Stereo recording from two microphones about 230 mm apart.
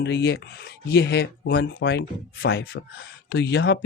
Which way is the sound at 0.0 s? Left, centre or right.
Left.